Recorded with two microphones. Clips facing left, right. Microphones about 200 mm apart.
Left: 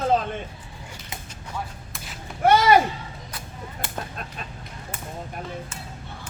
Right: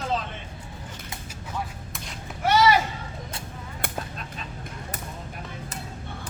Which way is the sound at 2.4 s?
50° left (ahead or behind).